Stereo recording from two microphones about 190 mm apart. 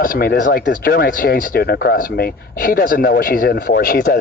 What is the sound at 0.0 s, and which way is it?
Speech, 50° left (ahead or behind).